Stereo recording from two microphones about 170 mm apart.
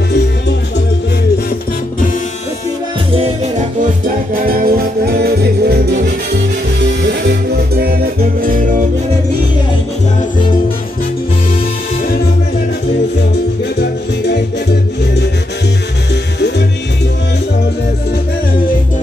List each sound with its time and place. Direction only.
4.4 s music: 55° right (ahead or behind); by 5.9 s 70° right (ahead or behind)
6.0 s music: 90° right
7.0 s music: 70° right (ahead or behind)
13.7 s music: 85° left
16.3 s music: 90° left